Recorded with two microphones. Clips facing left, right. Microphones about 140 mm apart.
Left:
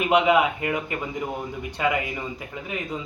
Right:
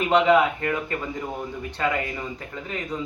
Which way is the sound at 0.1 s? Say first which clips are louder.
Right 1 dB; 10° left (ahead or behind).